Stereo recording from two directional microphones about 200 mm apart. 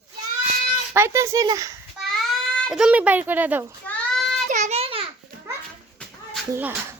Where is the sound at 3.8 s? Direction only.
Centre (ahead or behind).